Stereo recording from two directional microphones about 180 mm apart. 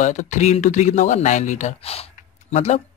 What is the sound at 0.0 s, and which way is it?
Speech, 45° left (ahead or behind).